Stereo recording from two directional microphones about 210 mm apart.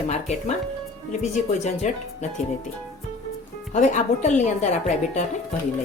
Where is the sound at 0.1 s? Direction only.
35° left (ahead or behind).